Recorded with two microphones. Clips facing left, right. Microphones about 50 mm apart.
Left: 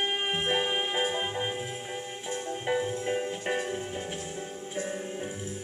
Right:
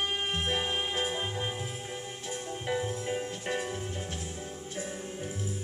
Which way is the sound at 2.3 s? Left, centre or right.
Centre.